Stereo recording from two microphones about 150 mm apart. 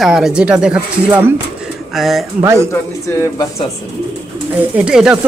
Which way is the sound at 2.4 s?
20° right (ahead or behind).